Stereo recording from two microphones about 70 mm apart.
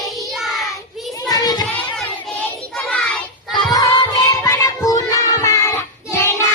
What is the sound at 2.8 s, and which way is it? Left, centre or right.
Child singing, centre.